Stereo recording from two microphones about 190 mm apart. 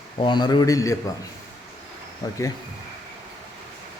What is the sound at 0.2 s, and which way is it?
Speech, 25° left (ahead or behind).